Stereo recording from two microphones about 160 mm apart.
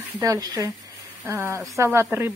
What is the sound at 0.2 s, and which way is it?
Speech, 20° right (ahead or behind).